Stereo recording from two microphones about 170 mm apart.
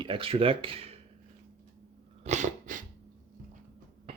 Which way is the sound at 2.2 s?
45° right (ahead or behind).